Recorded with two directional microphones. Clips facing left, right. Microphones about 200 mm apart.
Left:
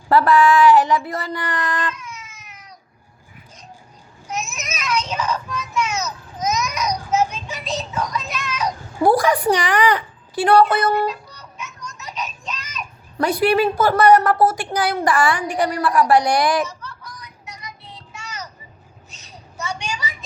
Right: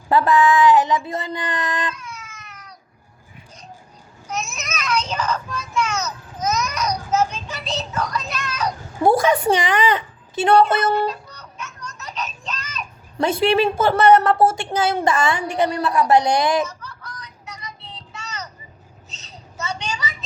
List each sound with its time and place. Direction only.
0.1 s a woman's voice: 20° right (ahead or behind)
4.3 s a sound: 10° left (ahead or behind)
5.7 s a child's voice: 10° left (ahead or behind)
9.0 s a woman's voice: 25° right (ahead or behind)
11.3 s music: 10° left (ahead or behind)
13.1 s a woman's voice: 25° right (ahead or behind)
17.0 s fowl: 10° left (ahead or behind)
19.1 s a sound: 10° left (ahead or behind)